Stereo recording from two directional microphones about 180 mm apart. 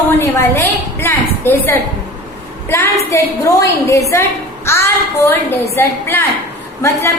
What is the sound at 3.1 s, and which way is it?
A woman's voice, 15° left (ahead or behind).